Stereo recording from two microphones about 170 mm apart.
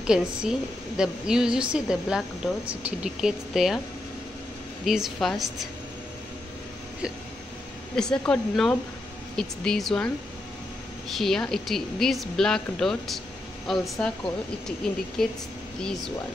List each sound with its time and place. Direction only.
0.0 s a woman's voice: 5° right (ahead or behind)
4.8 s a woman's voice: centre (ahead or behind)
7.9 s a woman's voice: 5° left (ahead or behind)